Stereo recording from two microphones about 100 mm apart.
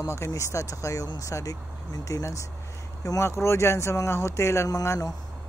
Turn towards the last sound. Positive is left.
turn(degrees=30)  # may be behind; listen again after turning